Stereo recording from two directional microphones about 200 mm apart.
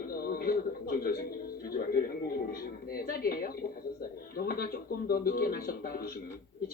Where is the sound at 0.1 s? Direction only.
50° left (ahead or behind).